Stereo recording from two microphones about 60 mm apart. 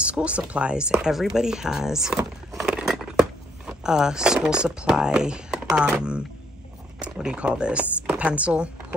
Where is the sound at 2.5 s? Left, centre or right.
Centre.